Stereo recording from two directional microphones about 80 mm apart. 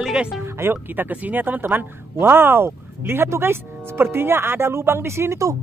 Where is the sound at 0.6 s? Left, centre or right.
Right.